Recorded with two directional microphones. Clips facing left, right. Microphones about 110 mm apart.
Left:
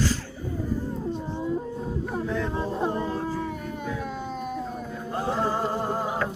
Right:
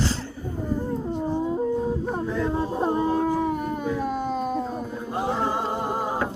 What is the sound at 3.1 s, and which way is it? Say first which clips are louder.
Howl: right 7 dB; 50° right (ahead or behind).